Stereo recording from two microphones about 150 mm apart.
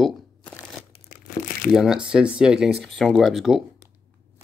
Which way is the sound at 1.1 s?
70° left (ahead or behind).